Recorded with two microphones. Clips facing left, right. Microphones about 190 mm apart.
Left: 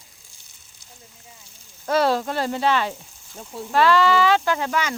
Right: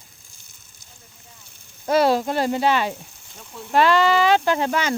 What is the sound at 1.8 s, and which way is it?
Speech, 15° right (ahead or behind).